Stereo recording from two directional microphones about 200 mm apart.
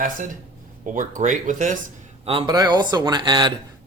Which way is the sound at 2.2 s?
30° right (ahead or behind).